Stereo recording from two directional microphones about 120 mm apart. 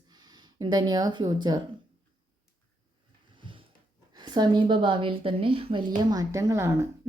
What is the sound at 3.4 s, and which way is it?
Dog, 45° right (ahead or behind).